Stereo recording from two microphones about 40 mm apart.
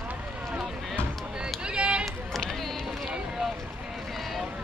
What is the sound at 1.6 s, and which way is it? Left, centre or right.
Run, right.